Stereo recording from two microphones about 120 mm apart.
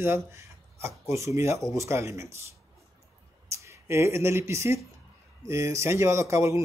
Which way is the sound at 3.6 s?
20° right (ahead or behind).